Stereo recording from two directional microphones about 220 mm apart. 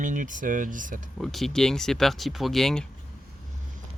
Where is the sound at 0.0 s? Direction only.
35° right (ahead or behind).